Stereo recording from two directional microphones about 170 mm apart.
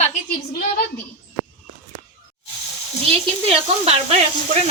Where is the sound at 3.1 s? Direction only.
35° right (ahead or behind).